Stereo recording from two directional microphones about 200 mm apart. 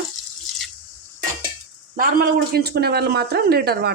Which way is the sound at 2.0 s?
50° right (ahead or behind).